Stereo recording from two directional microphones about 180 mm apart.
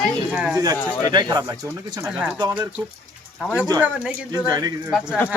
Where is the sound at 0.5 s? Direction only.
20° right (ahead or behind).